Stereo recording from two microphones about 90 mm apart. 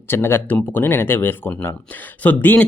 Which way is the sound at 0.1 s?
25° left (ahead or behind).